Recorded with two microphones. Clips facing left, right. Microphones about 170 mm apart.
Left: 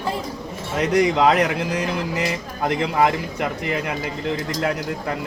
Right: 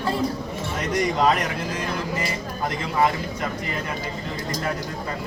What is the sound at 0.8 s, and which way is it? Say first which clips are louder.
A man's voice: left 5 dB; 70° left (ahead or behind).